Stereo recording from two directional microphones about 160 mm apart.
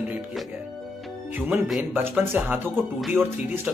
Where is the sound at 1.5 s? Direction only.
10° right (ahead or behind).